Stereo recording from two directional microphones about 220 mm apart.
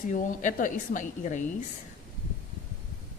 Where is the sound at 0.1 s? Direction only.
35° left (ahead or behind).